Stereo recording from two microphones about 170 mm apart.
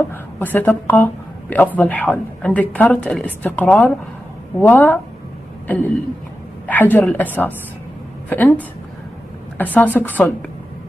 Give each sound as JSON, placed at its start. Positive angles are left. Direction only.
{"t": 0.4, "sound": "a woman's voice", "side_deg": 10}
{"t": 6.7, "sound": "a woman's voice", "side_deg": 10}